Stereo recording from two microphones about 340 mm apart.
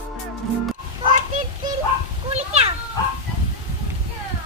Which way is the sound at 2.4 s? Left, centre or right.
Centre.